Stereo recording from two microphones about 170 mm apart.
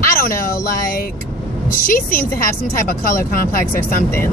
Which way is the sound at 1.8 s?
55° left (ahead or behind).